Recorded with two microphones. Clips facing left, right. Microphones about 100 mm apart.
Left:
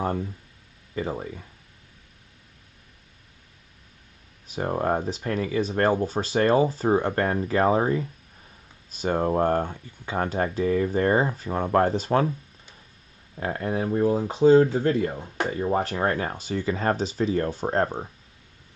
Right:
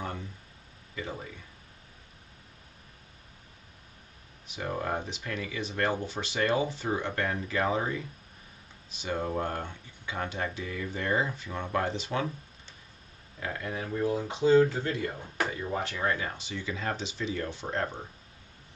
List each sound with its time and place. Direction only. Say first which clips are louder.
0.0 s speech: left 10 dB; 45° left (ahead or behind)
4.5 s speech: left 8 dB; 40° left (ahead or behind)
13.4 s speech: left 8 dB; 40° left (ahead or behind)